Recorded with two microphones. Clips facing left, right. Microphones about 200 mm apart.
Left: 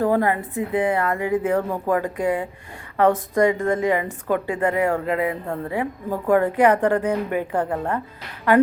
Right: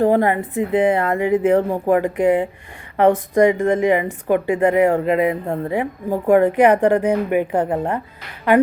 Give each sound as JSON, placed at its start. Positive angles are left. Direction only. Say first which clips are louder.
{"t": 0.0, "sound": "a woman's voice", "louder": "right 4 dB", "side_deg": -20}